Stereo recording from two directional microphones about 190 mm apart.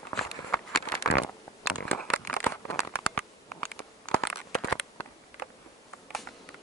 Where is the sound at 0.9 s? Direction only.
55° left (ahead or behind).